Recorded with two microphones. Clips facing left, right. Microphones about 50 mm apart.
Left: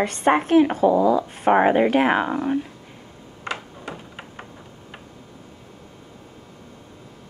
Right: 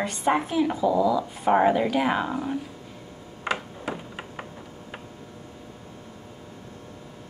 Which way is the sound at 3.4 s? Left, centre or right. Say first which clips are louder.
Right 2 dB; centre.